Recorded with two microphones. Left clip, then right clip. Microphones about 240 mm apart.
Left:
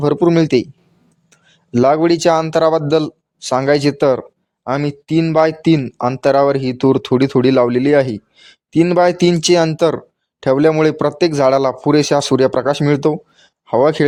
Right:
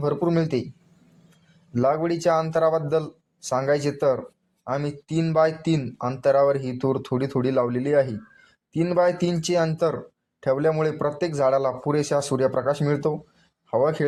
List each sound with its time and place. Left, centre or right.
0.0 s speech: left
1.7 s speech: left